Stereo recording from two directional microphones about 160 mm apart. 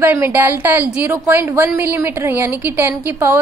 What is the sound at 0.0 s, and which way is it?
A woman's voice, 15° right (ahead or behind).